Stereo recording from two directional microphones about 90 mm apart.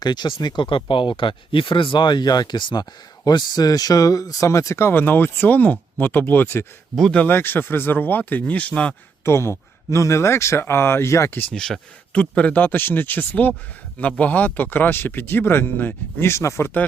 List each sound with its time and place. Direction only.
0.0 s speech: 55° left (ahead or behind); by 6.7 s 25° left (ahead or behind)
6.9 s speech: 5° left (ahead or behind)
7.2 s speech: 25° left (ahead or behind)
9.2 s speech: 30° left (ahead or behind)
11.5 s speech: 5° left (ahead or behind); by 16.7 s 30° left (ahead or behind)